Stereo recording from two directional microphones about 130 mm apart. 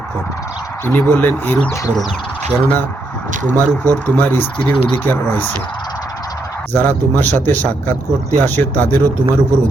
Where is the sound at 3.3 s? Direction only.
70° right (ahead or behind).